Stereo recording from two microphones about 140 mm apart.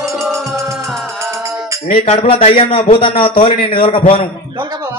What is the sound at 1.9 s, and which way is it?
A man's voice, 40° left (ahead or behind).